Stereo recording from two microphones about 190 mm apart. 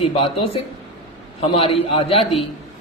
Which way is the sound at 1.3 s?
30° left (ahead or behind).